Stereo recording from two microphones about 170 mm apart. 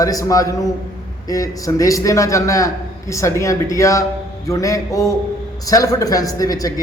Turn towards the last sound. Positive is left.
turn(degrees=20)  # may be behind; listen again after turning